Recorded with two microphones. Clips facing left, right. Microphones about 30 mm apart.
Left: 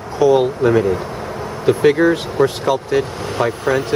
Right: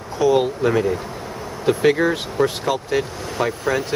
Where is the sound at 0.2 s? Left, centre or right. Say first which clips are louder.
Left 4 dB; centre.